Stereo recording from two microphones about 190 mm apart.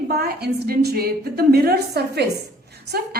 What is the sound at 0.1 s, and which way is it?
A woman's voice, 55° right (ahead or behind).